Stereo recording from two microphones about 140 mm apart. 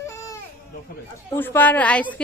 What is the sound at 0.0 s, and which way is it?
Baby cry, 20° left (ahead or behind).